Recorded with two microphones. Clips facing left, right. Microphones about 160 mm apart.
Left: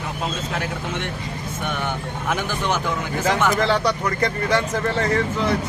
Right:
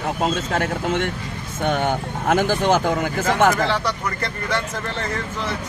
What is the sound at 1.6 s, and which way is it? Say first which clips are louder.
Speech: right 7 dB; 40° right (ahead or behind).